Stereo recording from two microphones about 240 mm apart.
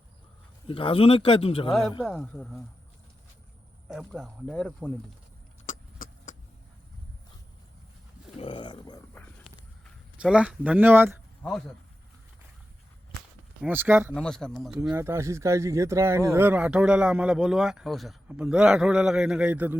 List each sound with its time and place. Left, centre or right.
0.7 s a man's voice: left
2.0 s speech: centre
3.8 s speech: centre
5.6 s vehicle: left
8.4 s a sound: left
10.2 s speech: centre
11.4 s speech: centre
13.6 s speech: centre
14.1 s speech: centre
14.8 s speech: centre